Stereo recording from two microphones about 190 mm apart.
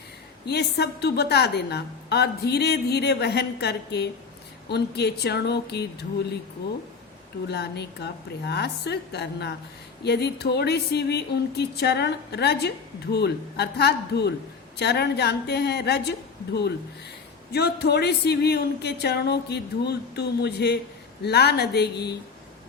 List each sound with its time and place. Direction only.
0.4 s speech: 60° left (ahead or behind)
7.4 s speech: 60° left (ahead or behind)